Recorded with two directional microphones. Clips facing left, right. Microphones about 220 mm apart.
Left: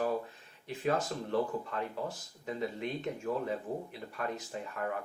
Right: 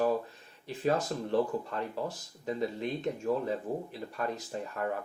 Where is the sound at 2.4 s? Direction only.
35° right (ahead or behind).